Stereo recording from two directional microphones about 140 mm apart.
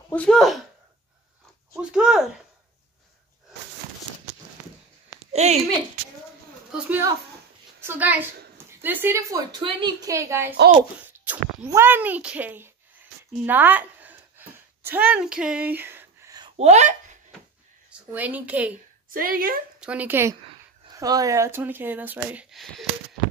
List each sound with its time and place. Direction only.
0.1 s speech: 5° left (ahead or behind)
1.8 s speech: 5° right (ahead or behind)
5.3 s a child's voice: 50° right (ahead or behind)
7.8 s a woman's voice: 15° right (ahead or behind)
9.5 s a woman's voice: 35° right (ahead or behind); by 14.1 s 10° right (ahead or behind)
14.4 s a sound: 15° right (ahead or behind)
14.8 s speech: 10° right (ahead or behind)
16.5 s speech: 55° right (ahead or behind)
17.8 s speech: 10° right (ahead or behind)
19.0 s a woman's voice: 90° right
19.8 s speech: 10° right (ahead or behind)